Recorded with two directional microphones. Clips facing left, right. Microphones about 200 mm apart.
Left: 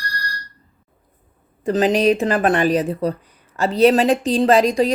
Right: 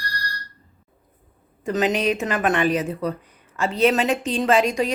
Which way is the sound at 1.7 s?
35° left (ahead or behind).